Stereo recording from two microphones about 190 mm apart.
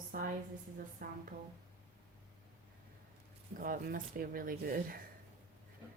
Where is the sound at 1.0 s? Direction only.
50° right (ahead or behind).